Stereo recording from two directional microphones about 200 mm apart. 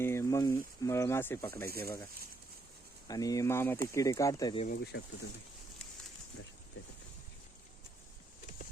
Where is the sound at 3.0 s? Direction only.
20° left (ahead or behind).